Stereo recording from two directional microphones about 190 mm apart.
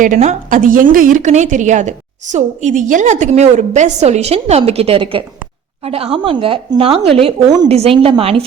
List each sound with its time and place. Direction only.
0.0 s a woman's voice: 40° right (ahead or behind)